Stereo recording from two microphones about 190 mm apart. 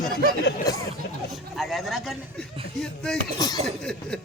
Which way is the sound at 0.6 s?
20° left (ahead or behind).